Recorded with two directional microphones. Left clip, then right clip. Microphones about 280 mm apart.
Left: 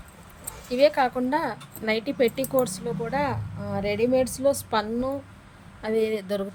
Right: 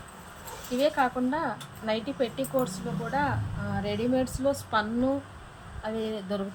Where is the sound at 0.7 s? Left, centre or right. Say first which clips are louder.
Left 5 dB; left.